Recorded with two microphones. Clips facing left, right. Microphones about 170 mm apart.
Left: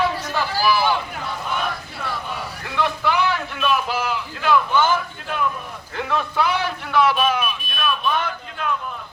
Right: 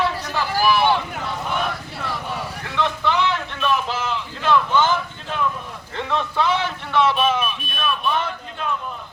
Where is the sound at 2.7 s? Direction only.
10° left (ahead or behind).